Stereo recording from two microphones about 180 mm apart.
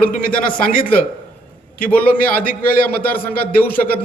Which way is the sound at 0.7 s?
50° left (ahead or behind).